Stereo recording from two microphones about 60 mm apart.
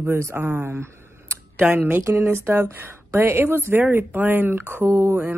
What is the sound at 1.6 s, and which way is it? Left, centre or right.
Speech, right.